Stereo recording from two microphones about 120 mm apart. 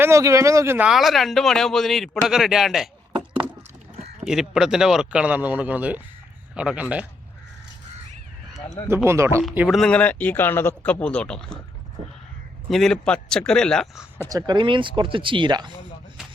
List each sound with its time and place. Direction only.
0.0 s speech: 25° right (ahead or behind)
0.9 s speech: centre (ahead or behind)
3.9 s a sound: 60° right (ahead or behind)
4.3 s speech: 5° right (ahead or behind)
9.0 s speech: 20° right (ahead or behind)
9.6 s speech: 5° left (ahead or behind)
12.7 s speech: 5° left (ahead or behind)
14.3 s speech: 35° right (ahead or behind)